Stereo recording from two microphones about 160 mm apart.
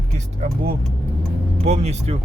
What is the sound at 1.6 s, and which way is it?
Speech, 45° right (ahead or behind).